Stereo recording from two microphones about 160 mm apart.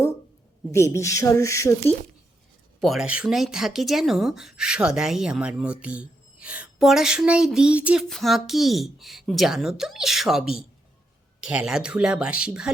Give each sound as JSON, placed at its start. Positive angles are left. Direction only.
{"t": 0.7, "sound": "speech", "side_deg": 20}
{"t": 2.8, "sound": "speech", "side_deg": 0}